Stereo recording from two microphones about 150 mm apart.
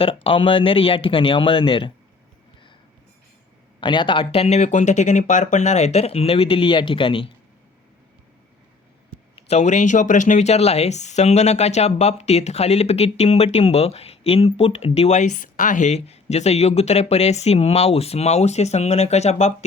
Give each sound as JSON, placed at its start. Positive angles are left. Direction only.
{"t": 0.0, "sound": "speech", "side_deg": 40}
{"t": 3.8, "sound": "speech", "side_deg": 30}
{"t": 9.3, "sound": "speech", "side_deg": 45}